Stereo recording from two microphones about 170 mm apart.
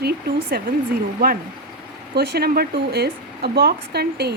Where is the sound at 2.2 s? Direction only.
65° right (ahead or behind).